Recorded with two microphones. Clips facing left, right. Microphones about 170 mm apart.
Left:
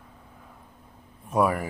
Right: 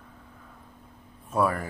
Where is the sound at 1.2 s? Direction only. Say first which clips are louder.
Left 2 dB; 15° left (ahead or behind).